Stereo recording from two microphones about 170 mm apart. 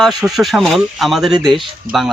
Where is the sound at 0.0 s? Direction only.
Centre (ahead or behind).